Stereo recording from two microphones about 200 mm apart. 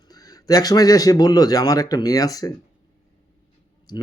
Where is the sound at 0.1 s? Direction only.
20° left (ahead or behind).